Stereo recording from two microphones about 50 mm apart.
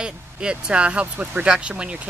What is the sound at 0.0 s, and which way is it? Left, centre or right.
Speech, centre.